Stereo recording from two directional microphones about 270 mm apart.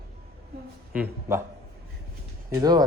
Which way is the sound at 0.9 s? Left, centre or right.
Centre.